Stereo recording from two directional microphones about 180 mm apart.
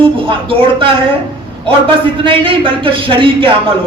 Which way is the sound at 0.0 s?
30° right (ahead or behind).